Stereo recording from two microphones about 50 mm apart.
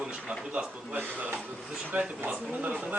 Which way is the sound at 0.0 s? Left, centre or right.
Centre.